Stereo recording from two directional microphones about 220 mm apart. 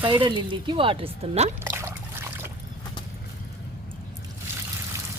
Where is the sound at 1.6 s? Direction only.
10° right (ahead or behind).